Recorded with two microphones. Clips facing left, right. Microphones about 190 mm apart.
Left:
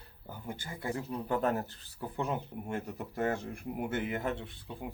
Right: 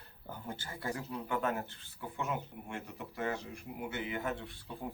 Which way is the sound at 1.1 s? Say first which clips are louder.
Left 5 dB; 35° left (ahead or behind).